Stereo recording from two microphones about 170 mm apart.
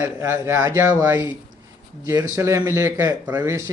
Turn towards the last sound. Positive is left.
turn(degrees=-15)  # may be behind; listen again after turning